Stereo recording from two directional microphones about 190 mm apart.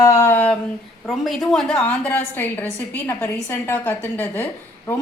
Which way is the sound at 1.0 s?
Centre (ahead or behind).